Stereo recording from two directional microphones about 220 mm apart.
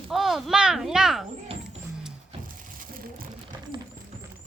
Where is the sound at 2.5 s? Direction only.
40° right (ahead or behind).